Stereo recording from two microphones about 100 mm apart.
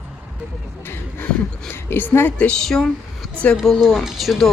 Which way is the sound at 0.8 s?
25° left (ahead or behind).